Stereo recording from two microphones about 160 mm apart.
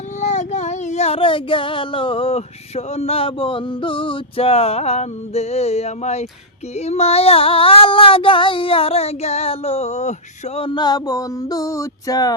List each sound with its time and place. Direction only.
0.2 s child singing: 45° left (ahead or behind); by 12.3 s 20° left (ahead or behind)